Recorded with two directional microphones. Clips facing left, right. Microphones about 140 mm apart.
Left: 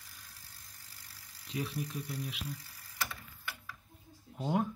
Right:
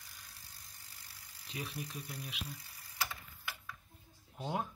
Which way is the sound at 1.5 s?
Centre (ahead or behind).